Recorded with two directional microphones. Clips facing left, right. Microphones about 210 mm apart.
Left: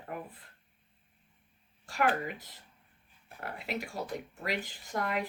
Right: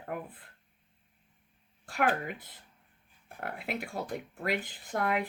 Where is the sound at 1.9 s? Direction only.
55° right (ahead or behind).